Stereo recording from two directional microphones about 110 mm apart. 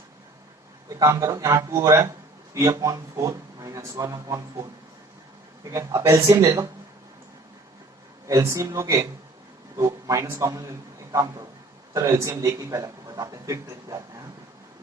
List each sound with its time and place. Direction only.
0.9 s a man's voice: 30° right (ahead or behind)
5.6 s speech: 30° right (ahead or behind)
8.3 s a man's voice: 30° right (ahead or behind)